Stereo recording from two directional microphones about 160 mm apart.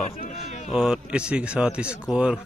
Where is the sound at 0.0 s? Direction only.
45° left (ahead or behind).